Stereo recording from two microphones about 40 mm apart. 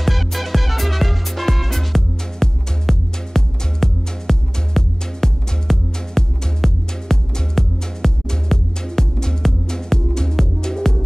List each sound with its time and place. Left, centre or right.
0.0 s music: centre